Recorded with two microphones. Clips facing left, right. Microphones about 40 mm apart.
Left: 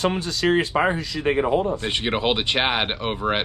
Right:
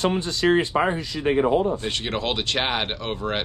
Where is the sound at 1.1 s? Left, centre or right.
Left.